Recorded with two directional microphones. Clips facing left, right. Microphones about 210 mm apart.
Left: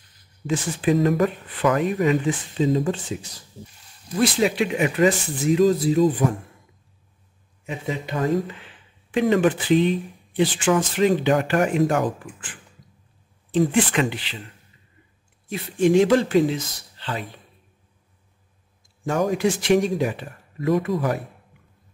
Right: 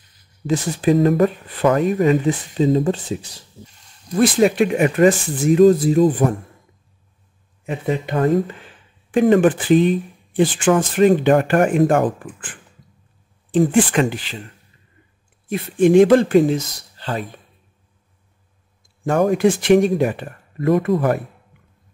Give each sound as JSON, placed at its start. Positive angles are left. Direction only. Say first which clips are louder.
{"t": 0.5, "sound": "speech", "louder": "right 4 dB", "side_deg": -40}
{"t": 4.2, "sound": "speech", "louder": "right 5 dB", "side_deg": -50}
{"t": 7.6, "sound": "speech", "louder": "right 6 dB", "side_deg": -55}
{"t": 15.4, "sound": "speech", "louder": "right 4 dB", "side_deg": -55}
{"t": 19.0, "sound": "speech", "louder": "right 5 dB", "side_deg": -55}